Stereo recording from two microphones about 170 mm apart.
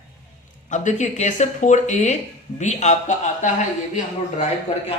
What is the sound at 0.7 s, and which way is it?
A man's voice, 45° left (ahead or behind).